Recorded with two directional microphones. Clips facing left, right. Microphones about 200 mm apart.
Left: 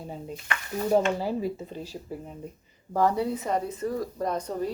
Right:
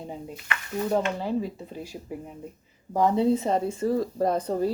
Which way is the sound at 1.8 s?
10° right (ahead or behind).